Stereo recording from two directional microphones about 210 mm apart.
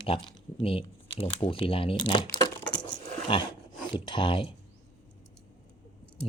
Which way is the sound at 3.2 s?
20° left (ahead or behind).